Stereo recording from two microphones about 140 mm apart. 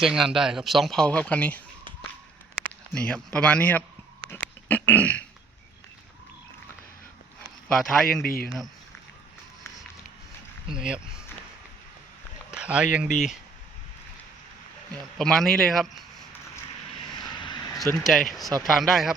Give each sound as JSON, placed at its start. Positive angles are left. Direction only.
{"t": 0.0, "sound": "speech", "side_deg": -5}
{"t": 2.9, "sound": "a man's voice", "side_deg": 5}
{"t": 4.3, "sound": "a sound", "side_deg": 10}
{"t": 7.7, "sound": "speech", "side_deg": 0}
{"t": 8.2, "sound": "a man's voice", "side_deg": 90}
{"t": 10.8, "sound": "speech", "side_deg": -5}
{"t": 12.5, "sound": "speech", "side_deg": -5}
{"t": 15.2, "sound": "speech", "side_deg": 5}
{"t": 17.2, "sound": "vehicle", "side_deg": 30}
{"t": 17.9, "sound": "speech", "side_deg": 0}